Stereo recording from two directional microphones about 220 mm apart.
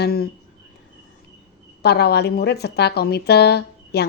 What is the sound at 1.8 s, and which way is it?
Speech, 45° left (ahead or behind).